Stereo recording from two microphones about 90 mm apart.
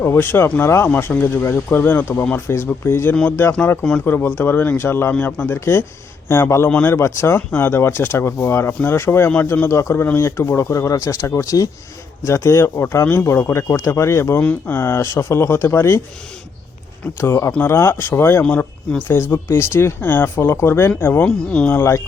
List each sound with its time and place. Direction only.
0.0 s speech: 25° left (ahead or behind)
17.2 s speech: 30° left (ahead or behind)
18.4 s speech: 15° left (ahead or behind)
19.1 s speech: 25° left (ahead or behind)
21.2 s speech: 10° left (ahead or behind)
21.8 s speech: 30° left (ahead or behind)